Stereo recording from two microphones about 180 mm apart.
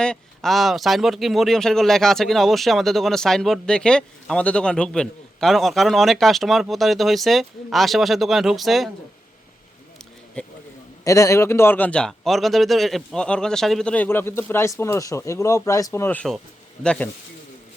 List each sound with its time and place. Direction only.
0.0 s speech: 5° left (ahead or behind)
10.4 s speech: 5° left (ahead or behind)
11.0 s speech: 15° left (ahead or behind)